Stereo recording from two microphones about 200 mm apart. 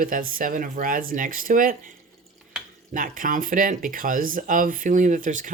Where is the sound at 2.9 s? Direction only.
40° right (ahead or behind).